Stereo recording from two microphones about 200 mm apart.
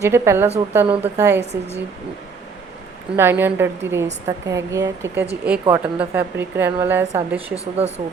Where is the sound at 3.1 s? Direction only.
10° right (ahead or behind).